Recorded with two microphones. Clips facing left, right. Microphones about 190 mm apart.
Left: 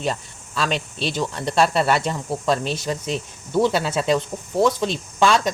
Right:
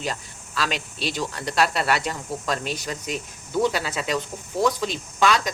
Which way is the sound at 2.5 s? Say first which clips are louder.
Left 6 dB; 25° left (ahead or behind).